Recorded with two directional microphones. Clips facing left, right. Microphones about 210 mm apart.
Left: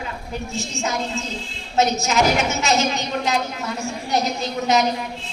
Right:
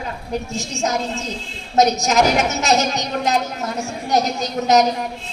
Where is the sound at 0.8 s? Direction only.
40° right (ahead or behind).